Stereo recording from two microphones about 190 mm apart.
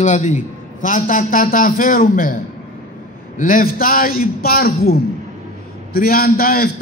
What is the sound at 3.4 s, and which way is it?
A man's voice, 50° left (ahead or behind).